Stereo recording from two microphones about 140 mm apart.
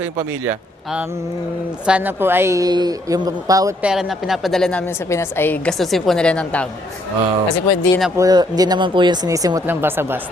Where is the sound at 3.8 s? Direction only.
5° right (ahead or behind).